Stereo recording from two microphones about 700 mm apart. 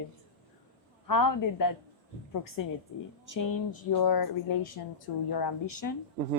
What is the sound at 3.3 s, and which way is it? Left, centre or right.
Speech, left.